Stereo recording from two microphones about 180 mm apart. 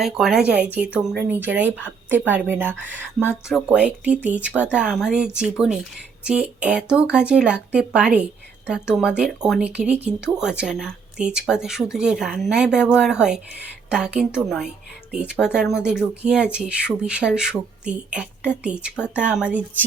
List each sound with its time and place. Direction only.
0.0 s speech: 5° right (ahead or behind)